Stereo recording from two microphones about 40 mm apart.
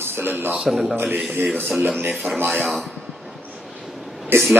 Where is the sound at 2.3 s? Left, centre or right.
Right.